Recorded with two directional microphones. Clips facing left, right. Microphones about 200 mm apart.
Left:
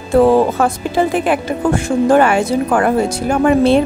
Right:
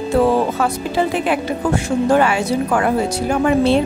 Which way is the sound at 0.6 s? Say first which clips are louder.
Left 3 dB; 50° left (ahead or behind).